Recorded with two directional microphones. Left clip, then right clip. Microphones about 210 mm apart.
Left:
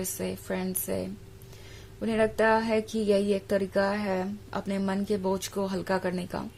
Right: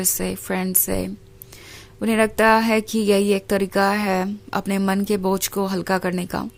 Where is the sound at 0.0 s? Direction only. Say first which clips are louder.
Right 8 dB; 35° right (ahead or behind).